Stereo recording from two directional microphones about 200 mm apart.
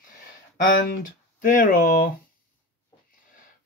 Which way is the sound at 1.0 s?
40° left (ahead or behind).